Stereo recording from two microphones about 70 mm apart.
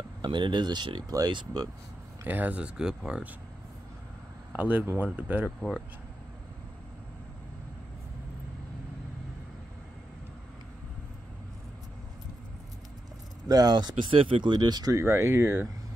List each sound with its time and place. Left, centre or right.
0.2 s speech: right
2.2 s speech: right
2.8 s speech: centre
4.5 s speech: right
13.5 s speech: right
15.0 s speech: right